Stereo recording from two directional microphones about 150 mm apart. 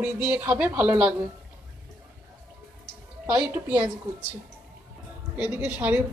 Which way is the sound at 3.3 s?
10° right (ahead or behind).